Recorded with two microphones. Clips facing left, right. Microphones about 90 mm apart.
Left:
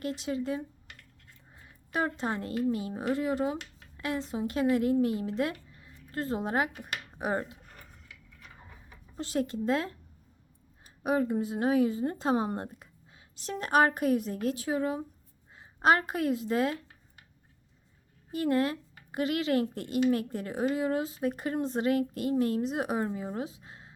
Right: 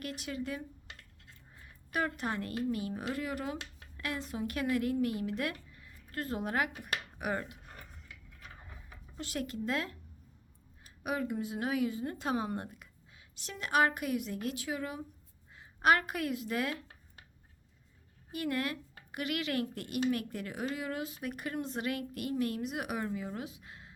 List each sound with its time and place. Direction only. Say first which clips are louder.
0.0 s a woman's voice: left 6 dB; 25° left (ahead or behind)
9.1 s a woman's voice: left 7 dB; 30° left (ahead or behind)
18.3 s speech: left 7 dB; 30° left (ahead or behind)